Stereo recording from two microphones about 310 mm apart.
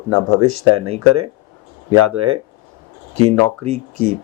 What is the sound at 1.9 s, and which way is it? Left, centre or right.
Speech, right.